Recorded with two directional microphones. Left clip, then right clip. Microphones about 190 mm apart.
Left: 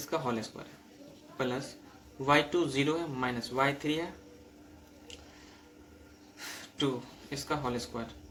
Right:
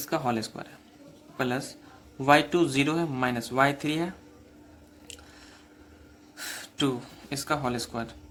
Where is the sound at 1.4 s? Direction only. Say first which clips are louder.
Right 4 dB; 55° right (ahead or behind).